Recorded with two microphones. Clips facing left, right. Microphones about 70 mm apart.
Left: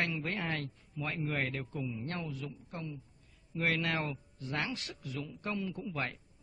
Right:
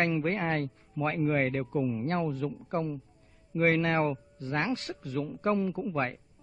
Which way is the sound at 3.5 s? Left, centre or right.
Right.